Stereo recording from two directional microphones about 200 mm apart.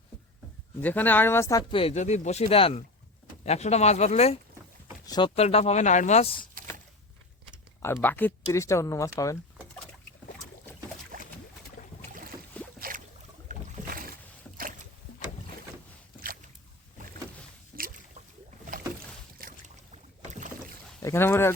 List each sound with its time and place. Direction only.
0.8 s speech: 10° left (ahead or behind)
1.8 s speech: 35° left (ahead or behind)
5.0 s speech: 20° left (ahead or behind)
8.0 s speech: 10° left (ahead or behind)
13.5 s boat: 45° right (ahead or behind)
17.7 s boat: 45° right (ahead or behind)
19.4 s boat: 40° right (ahead or behind)
21.0 s speech: 10° left (ahead or behind)